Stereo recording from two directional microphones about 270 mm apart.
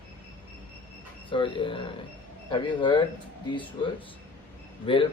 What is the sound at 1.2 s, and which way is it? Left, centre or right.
Speech, centre.